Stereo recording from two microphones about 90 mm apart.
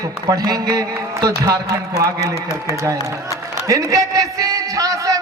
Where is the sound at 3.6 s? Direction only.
35° right (ahead or behind).